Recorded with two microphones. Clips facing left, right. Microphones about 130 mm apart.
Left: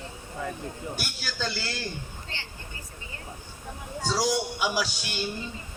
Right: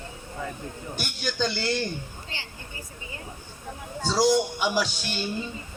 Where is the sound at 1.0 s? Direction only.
5° left (ahead or behind).